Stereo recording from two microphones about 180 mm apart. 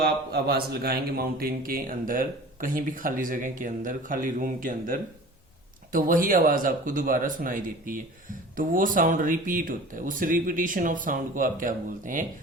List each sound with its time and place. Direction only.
0.0 s a man's voice: 60° right (ahead or behind)